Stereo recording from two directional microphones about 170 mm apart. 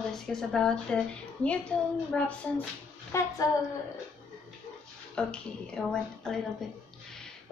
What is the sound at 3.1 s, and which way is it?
Speech, 15° left (ahead or behind).